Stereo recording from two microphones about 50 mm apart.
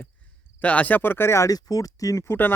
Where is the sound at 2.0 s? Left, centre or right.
Left.